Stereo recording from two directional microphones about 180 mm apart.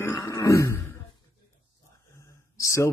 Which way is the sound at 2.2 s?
15° left (ahead or behind).